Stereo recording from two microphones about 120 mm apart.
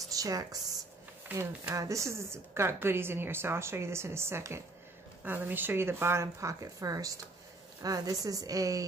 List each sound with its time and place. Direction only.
0.1 s speech: 30° right (ahead or behind)